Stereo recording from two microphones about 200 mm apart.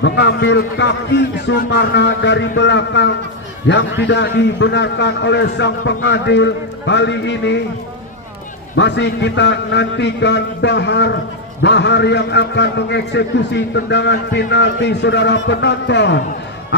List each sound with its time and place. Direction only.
0.0 s a man's voice: 60° left (ahead or behind)
8.7 s a man's voice: 60° left (ahead or behind)